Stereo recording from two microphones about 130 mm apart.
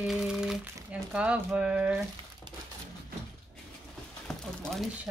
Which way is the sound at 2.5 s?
40° right (ahead or behind).